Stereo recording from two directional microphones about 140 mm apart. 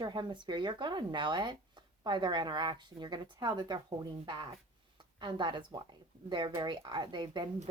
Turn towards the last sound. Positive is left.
turn(degrees=-35)  # may be behind; listen again after turning